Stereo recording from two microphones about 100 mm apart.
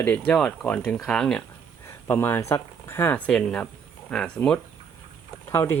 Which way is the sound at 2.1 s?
25° left (ahead or behind).